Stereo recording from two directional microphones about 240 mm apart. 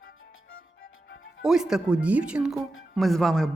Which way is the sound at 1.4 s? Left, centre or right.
Centre.